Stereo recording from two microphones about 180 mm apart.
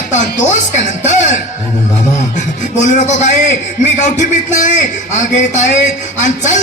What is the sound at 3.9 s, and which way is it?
Music, 45° left (ahead or behind).